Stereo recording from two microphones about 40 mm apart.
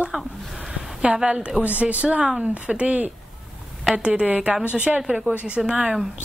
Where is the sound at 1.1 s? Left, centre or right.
Right.